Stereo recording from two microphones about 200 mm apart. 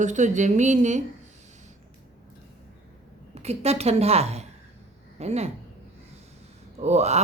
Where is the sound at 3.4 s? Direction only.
30° right (ahead or behind).